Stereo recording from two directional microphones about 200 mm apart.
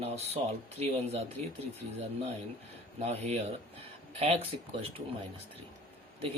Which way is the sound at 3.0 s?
35° right (ahead or behind).